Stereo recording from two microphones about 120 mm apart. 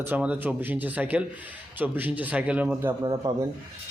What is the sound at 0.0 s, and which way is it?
Speech, 15° right (ahead or behind).